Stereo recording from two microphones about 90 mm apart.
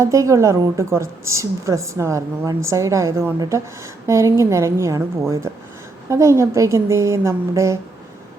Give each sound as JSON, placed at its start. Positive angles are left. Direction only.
{"t": 0.0, "sound": "a woman's voice", "side_deg": -35}